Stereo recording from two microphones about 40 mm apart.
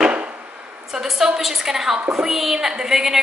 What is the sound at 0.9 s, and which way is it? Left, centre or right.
A woman's voice, centre.